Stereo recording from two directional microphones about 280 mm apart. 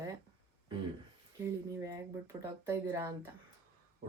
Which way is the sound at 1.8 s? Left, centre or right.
Centre.